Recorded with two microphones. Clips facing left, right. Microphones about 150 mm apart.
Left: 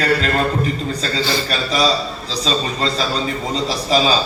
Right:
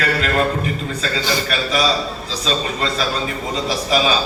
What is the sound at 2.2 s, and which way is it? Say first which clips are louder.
A man's voice: left 2 dB; 35° left (ahead or behind).